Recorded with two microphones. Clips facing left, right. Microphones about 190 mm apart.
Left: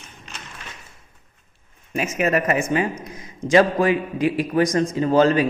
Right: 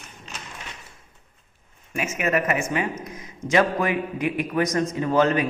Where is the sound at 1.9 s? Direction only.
35° left (ahead or behind).